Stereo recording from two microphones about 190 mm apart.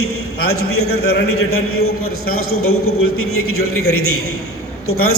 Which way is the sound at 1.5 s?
90° left.